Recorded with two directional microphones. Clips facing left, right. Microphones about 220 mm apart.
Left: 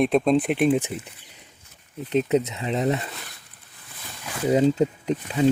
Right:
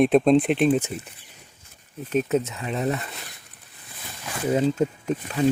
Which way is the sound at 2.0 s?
20° left (ahead or behind).